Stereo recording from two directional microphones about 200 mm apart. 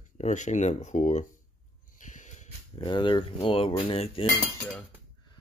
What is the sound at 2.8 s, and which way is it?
Speech, 25° left (ahead or behind).